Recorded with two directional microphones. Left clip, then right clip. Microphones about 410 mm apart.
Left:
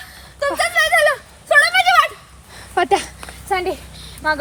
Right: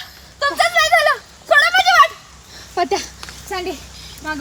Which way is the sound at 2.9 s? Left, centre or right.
Left.